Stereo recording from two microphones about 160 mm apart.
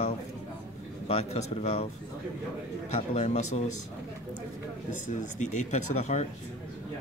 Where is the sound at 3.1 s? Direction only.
45° left (ahead or behind).